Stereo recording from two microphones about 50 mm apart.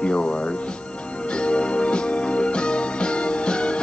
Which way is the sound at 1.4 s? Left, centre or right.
Left.